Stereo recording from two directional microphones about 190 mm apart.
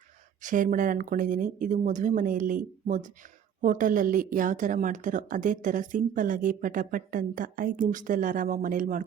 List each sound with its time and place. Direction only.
0.4 s a woman's voice: 45° right (ahead or behind)